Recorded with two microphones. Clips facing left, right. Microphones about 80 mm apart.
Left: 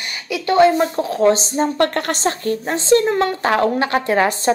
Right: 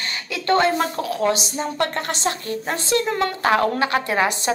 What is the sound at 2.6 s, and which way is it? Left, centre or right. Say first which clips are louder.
A woman's voice: left 7 dB; left.